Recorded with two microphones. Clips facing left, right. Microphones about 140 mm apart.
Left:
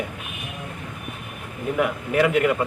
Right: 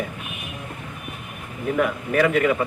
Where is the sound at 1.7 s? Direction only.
10° left (ahead or behind).